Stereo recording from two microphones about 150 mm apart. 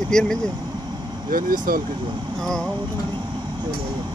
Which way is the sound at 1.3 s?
65° right (ahead or behind).